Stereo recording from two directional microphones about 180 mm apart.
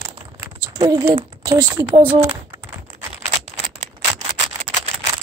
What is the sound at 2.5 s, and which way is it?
Typing, 15° right (ahead or behind).